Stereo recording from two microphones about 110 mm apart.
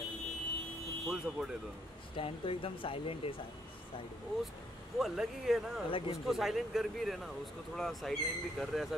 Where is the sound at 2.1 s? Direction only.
55° left (ahead or behind).